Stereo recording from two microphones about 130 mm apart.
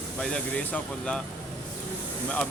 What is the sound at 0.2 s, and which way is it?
Speech, 5° left (ahead or behind).